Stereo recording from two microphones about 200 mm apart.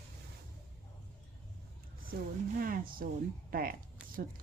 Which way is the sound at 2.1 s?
55° right (ahead or behind).